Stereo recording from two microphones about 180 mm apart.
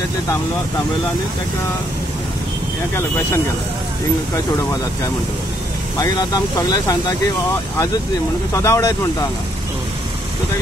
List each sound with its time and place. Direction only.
5.9 s speech: 20° left (ahead or behind)
8.5 s speech: 15° left (ahead or behind)